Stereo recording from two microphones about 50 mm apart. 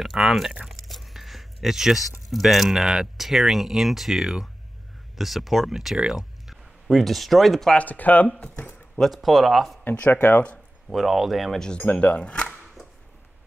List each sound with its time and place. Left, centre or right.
0.0 s speech: centre
0.7 s a sound: centre
2.9 s speech: centre
7.7 s speech: left
8.4 s a sound: left
9.0 s speech: centre
9.9 s speech: left
10.9 s speech: centre
11.6 s speech: left